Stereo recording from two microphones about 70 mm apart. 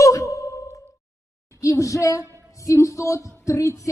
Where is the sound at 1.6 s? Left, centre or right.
Left.